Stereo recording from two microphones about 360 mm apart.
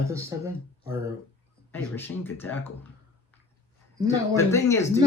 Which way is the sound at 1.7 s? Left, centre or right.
Centre.